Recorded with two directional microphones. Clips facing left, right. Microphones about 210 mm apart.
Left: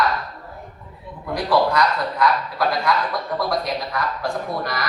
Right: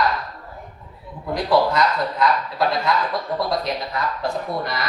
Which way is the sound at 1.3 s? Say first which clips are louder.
Even; 25° right (ahead or behind).